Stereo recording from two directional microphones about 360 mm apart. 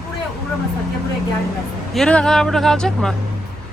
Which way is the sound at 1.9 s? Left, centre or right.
Centre.